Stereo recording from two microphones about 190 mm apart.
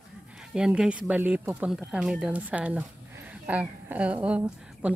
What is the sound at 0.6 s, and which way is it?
A woman's voice, 5° right (ahead or behind).